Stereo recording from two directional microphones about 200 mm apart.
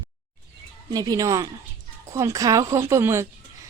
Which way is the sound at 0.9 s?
20° right (ahead or behind).